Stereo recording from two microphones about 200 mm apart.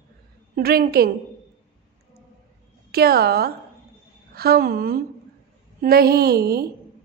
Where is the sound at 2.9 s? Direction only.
50° right (ahead or behind).